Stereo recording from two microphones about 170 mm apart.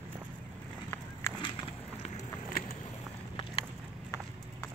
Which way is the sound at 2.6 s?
60° left (ahead or behind).